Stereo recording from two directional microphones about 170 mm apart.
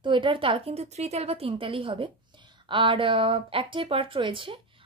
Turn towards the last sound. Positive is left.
turn(degrees=-30)  # may be behind; listen again after turning